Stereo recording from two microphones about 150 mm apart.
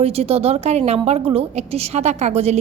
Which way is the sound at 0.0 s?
40° right (ahead or behind).